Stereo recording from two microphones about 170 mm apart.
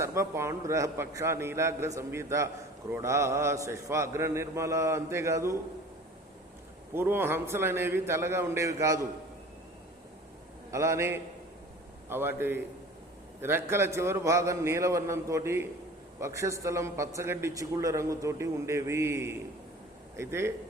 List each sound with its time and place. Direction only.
0.0 s a man's voice: 15° right (ahead or behind)
6.9 s a man's voice: 15° right (ahead or behind)
10.7 s a man's voice: 15° right (ahead or behind)